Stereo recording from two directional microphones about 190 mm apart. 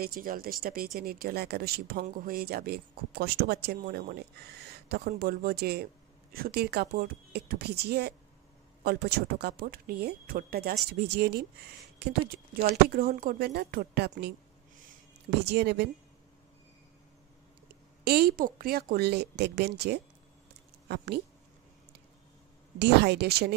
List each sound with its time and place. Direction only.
0.0 s speech: 50° right (ahead or behind)
15.4 s speech: 60° right (ahead or behind)
18.0 s speech: 55° right (ahead or behind)
22.8 s speech: 60° right (ahead or behind)